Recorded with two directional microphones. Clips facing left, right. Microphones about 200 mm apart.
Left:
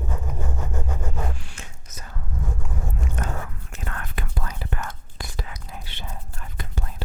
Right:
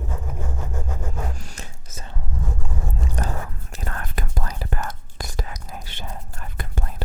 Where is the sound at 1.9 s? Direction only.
25° right (ahead or behind).